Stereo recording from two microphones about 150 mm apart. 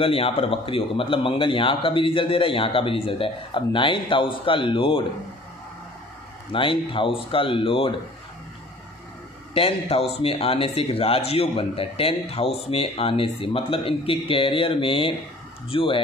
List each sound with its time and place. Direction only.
0.0 s a man's voice: 40° left (ahead or behind)
6.5 s a man's voice: 35° left (ahead or behind)
9.5 s a man's voice: 40° left (ahead or behind)